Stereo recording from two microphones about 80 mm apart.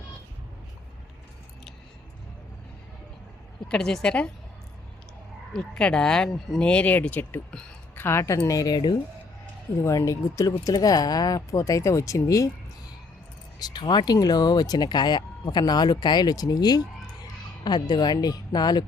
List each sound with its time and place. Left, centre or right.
3.7 s speech: centre
5.5 s a woman's voice: centre; by 8.4 s left
8.4 s speech: left
9.8 s speech: left
13.6 s speech: left